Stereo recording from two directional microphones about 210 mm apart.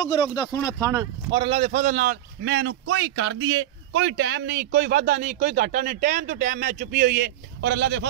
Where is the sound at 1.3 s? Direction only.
25° right (ahead or behind); by 2.7 s 55° right (ahead or behind).